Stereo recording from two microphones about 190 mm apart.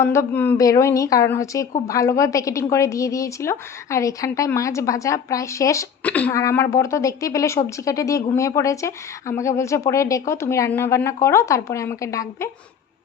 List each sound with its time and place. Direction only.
0.0 s a woman's voice: 15° left (ahead or behind)